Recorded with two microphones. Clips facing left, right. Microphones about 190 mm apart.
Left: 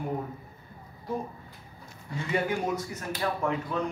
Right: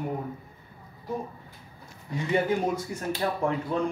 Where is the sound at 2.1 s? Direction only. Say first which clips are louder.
Right 3 dB; 20° right (ahead or behind).